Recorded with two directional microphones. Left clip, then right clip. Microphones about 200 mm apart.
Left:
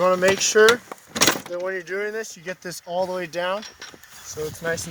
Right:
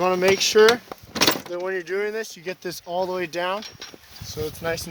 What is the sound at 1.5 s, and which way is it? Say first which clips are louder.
Speech: right 1 dB; 40° right (ahead or behind).